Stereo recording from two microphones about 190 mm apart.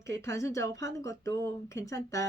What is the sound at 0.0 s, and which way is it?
Speech, 15° left (ahead or behind).